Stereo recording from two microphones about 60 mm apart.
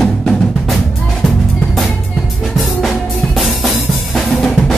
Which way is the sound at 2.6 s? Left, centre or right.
Centre.